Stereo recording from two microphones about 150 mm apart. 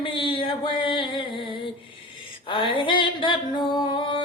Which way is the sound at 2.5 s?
35° left (ahead or behind).